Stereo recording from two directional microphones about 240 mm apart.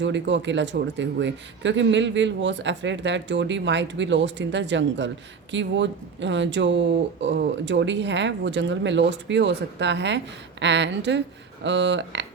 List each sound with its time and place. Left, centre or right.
0.0 s speech: right